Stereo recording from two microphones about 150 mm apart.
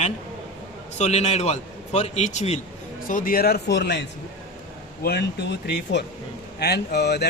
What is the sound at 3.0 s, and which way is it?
Speech, 65° left (ahead or behind).